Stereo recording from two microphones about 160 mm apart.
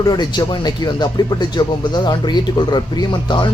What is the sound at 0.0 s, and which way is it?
Speech, 25° left (ahead or behind).